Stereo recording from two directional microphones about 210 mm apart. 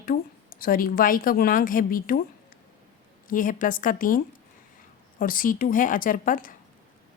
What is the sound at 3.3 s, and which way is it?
A woman's voice, 40° left (ahead or behind).